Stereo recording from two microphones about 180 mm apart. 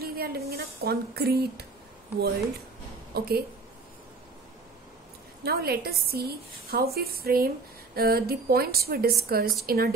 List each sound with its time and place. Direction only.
0.0 s a sound: 60° right (ahead or behind)
0.5 s a woman's voice: 60° right (ahead or behind)
3.1 s a woman's voice: 65° right (ahead or behind)
5.4 s a woman's voice: 60° right (ahead or behind)